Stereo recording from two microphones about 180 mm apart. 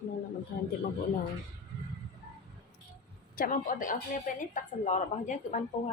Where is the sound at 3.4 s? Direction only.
50° left (ahead or behind).